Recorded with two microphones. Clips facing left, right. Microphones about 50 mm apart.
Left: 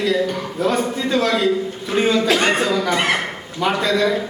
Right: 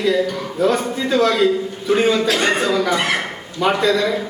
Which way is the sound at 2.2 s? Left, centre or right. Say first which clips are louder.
Even; centre.